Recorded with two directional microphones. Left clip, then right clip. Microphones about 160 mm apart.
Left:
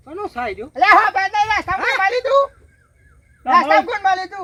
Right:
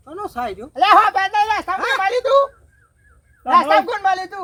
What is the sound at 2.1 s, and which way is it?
Speech, centre (ahead or behind).